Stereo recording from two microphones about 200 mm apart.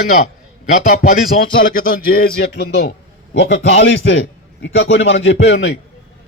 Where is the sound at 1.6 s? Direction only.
45° left (ahead or behind).